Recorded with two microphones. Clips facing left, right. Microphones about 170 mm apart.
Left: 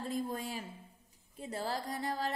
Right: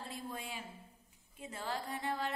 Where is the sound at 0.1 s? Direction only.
40° left (ahead or behind).